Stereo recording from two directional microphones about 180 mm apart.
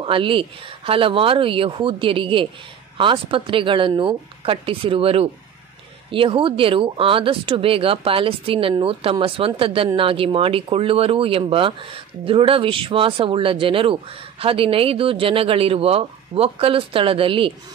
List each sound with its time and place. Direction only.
0.0 s speech: 30° right (ahead or behind)